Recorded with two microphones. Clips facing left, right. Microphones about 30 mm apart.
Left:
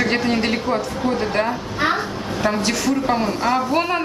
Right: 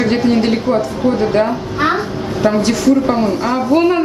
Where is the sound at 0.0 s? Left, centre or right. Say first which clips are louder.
Right 5 dB; centre.